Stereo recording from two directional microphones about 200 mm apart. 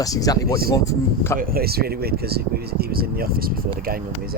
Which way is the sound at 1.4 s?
50° right (ahead or behind).